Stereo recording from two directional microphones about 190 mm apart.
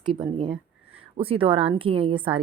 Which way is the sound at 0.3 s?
25° right (ahead or behind).